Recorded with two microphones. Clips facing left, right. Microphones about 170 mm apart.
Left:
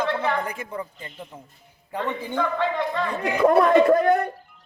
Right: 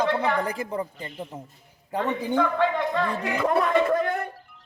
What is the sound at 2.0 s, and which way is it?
Speech, 15° right (ahead or behind).